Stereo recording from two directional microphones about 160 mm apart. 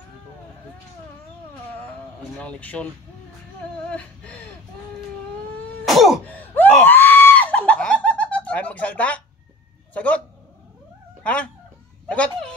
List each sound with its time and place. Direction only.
2.3 s speech: 10° left (ahead or behind)
3.9 s speech: 10° left (ahead or behind)
5.9 s throat clearing: centre (ahead or behind)
6.2 s laughter: 10° left (ahead or behind)
9.9 s speech: 10° left (ahead or behind)
12.1 s a sound: 5° left (ahead or behind)